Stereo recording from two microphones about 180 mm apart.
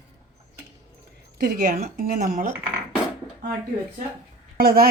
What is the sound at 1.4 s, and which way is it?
Speech, 55° right (ahead or behind).